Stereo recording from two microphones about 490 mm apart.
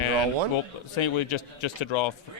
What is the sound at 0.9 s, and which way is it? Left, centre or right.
Speech, left.